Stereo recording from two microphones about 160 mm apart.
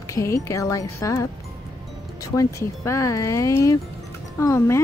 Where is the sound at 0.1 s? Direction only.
20° left (ahead or behind).